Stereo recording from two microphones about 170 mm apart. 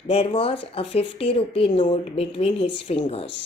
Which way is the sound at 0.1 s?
35° left (ahead or behind).